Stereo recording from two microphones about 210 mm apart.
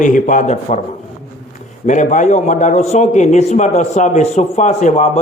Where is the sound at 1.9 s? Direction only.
35° left (ahead or behind).